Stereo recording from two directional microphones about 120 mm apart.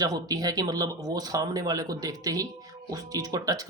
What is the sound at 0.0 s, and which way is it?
Speech, 30° right (ahead or behind).